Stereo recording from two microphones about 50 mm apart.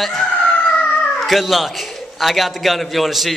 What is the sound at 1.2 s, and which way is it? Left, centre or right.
A man's voice, centre.